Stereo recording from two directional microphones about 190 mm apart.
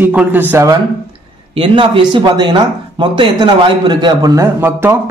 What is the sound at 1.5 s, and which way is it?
Speech, 25° right (ahead or behind).